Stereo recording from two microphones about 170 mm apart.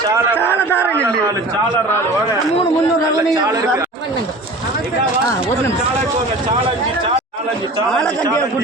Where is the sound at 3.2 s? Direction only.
20° right (ahead or behind).